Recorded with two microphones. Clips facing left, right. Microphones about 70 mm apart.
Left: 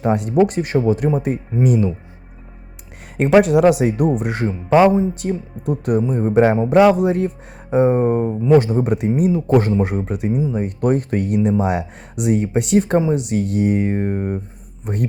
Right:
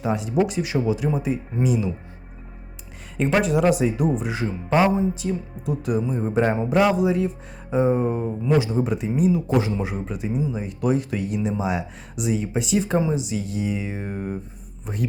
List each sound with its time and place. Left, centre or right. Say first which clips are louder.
0.0 s speech: left 6 dB; left
3.2 s speech: left 7 dB; left